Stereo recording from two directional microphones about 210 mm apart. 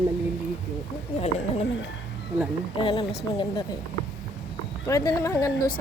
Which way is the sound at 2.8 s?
25° left (ahead or behind).